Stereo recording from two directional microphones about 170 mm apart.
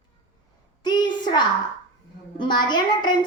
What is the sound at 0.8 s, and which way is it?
A woman's voice, 25° left (ahead or behind).